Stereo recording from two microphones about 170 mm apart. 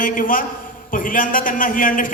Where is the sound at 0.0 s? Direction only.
55° left (ahead or behind).